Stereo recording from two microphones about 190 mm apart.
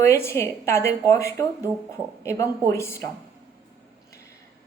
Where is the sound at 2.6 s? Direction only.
15° left (ahead or behind).